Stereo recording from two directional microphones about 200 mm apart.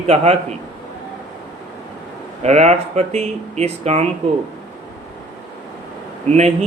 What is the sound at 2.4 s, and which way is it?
Speech, 35° right (ahead or behind).